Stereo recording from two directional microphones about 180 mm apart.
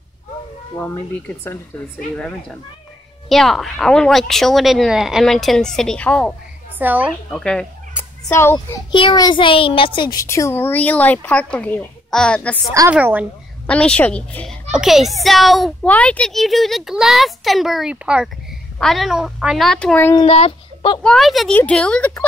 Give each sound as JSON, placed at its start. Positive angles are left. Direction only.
{"t": 0.7, "sound": "a woman's voice", "side_deg": 10}
{"t": 6.8, "sound": "a woman's voice", "side_deg": -10}
{"t": 7.2, "sound": "a child's voice", "side_deg": 5}
{"t": 8.9, "sound": "a woman's voice", "side_deg": 25}
{"t": 12.9, "sound": "a woman's voice", "side_deg": -10}
{"t": 13.7, "sound": "a child's voice", "side_deg": 5}
{"t": 20.2, "sound": "a child's voice", "side_deg": 35}
{"t": 21.0, "sound": "a child's voice", "side_deg": 0}